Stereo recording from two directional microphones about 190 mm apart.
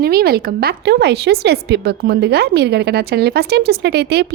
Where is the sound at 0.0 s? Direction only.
55° right (ahead or behind).